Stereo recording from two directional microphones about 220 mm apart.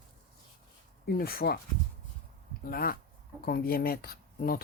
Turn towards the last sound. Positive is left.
turn(degrees=40)  # may be behind; listen again after turning